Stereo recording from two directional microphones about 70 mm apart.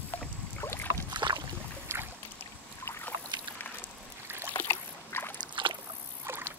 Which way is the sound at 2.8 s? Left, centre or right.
Left.